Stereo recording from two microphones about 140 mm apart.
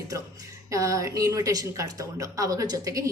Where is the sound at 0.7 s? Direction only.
20° right (ahead or behind).